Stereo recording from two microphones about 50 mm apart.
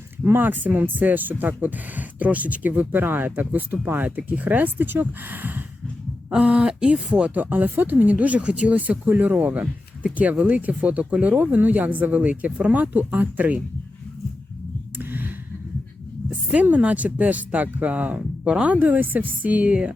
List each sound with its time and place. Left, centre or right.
0.3 s speech: right
6.3 s speech: right
14.9 s a sound: right
16.5 s speech: right
18.8 s speech: right